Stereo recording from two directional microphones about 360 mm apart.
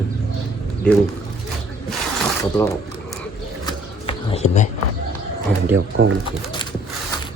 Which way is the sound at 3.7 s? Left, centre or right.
Centre.